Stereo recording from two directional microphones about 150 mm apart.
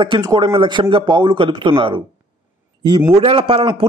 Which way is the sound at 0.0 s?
30° right (ahead or behind).